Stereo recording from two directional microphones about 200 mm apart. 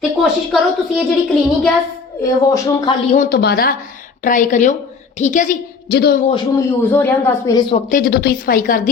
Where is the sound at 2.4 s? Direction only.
15° left (ahead or behind).